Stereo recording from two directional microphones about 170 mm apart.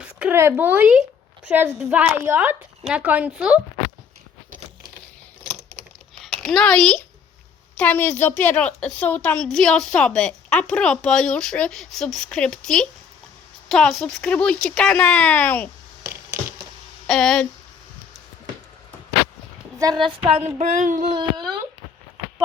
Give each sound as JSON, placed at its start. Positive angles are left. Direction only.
{"t": 0.0, "sound": "speech", "side_deg": -10}
{"t": 6.2, "sound": "a woman's voice", "side_deg": 5}
{"t": 17.1, "sound": "a woman's voice", "side_deg": 5}
{"t": 19.8, "sound": "a sound", "side_deg": -25}
{"t": 21.1, "sound": "speech", "side_deg": -25}